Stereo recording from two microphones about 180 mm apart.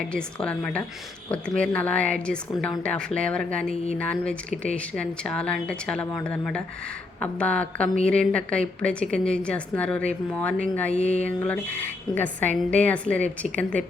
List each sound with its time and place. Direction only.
0.1 s a woman's voice: 5° left (ahead or behind)
3.2 s a woman's voice: 5° left (ahead or behind)
10.9 s mantra: 35° left (ahead or behind)
11.2 s a woman's voice: 10° left (ahead or behind)